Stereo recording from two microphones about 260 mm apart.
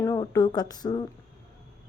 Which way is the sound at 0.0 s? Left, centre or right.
Centre.